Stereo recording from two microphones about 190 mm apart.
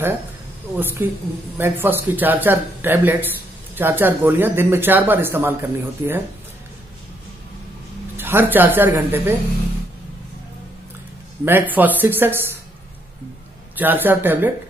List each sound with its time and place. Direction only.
0.7 s speech: 10° right (ahead or behind)
8.2 s speech: 10° right (ahead or behind)
11.4 s speech: 10° right (ahead or behind)
13.7 s speech: 10° right (ahead or behind)